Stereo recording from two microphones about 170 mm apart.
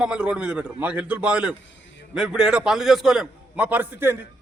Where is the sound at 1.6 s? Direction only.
90° left.